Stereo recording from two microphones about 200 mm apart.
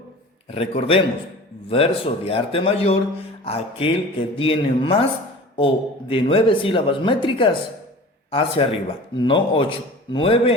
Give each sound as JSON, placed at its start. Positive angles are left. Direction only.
{"t": 0.5, "sound": "speech", "side_deg": 30}